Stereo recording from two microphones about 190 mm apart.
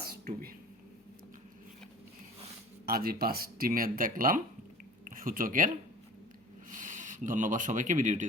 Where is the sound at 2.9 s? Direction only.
50° right (ahead or behind).